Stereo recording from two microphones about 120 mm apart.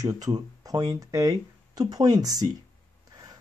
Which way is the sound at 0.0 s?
30° right (ahead or behind).